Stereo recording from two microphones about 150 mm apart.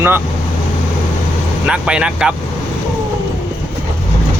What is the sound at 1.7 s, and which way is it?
Speech, 5° right (ahead or behind).